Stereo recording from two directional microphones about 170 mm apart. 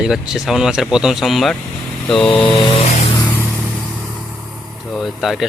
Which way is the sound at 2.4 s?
30° left (ahead or behind).